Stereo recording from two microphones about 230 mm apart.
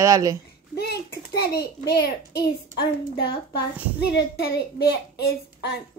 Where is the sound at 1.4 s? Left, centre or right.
Left.